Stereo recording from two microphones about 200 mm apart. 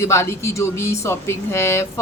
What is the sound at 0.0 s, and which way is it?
A woman's voice, 15° left (ahead or behind).